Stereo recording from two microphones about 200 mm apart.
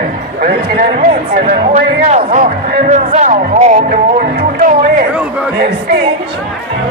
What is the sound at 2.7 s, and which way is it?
Music, 40° right (ahead or behind).